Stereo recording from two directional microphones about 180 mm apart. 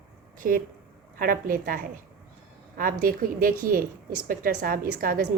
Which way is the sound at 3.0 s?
55° right (ahead or behind).